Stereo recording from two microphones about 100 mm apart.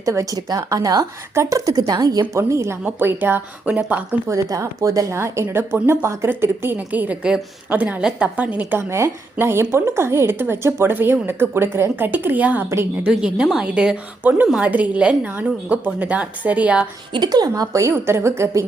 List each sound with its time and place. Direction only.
0.0 s a woman's voice: 30° right (ahead or behind)
2.3 s a woman's voice: 30° right (ahead or behind)
4.3 s a woman's voice: 30° right (ahead or behind); by 16.9 s 15° right (ahead or behind)
17.1 s a woman's voice: 45° right (ahead or behind); by 18.6 s 30° right (ahead or behind)